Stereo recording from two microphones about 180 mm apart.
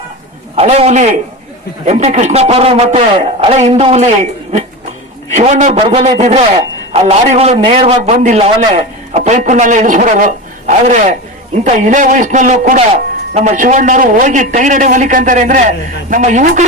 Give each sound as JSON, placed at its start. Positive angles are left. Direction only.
{"t": 0.5, "sound": "a man's voice", "side_deg": -35}